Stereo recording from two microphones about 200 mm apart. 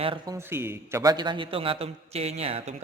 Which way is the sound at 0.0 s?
25° right (ahead or behind).